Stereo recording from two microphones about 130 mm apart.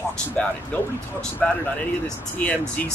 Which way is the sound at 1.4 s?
5° left (ahead or behind).